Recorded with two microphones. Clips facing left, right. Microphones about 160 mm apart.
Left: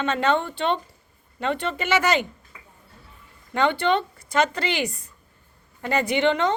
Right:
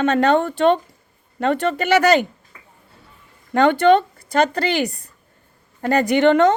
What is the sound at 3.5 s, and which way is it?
A woman's voice, 45° right (ahead or behind).